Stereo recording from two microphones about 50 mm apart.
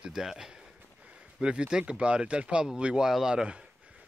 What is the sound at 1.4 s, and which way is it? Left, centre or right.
Speech, centre.